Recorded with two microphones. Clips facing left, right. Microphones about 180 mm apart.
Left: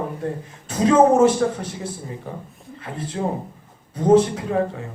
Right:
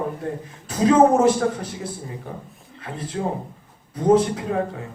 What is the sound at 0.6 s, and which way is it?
Speech, 30° left (ahead or behind).